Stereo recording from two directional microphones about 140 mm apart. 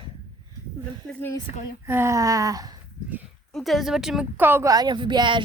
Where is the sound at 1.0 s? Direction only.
15° left (ahead or behind).